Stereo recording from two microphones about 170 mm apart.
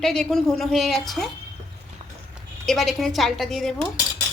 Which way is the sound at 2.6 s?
Centre (ahead or behind).